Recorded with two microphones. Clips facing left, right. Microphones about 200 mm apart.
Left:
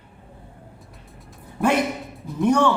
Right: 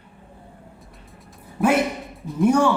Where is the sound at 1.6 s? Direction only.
Centre (ahead or behind).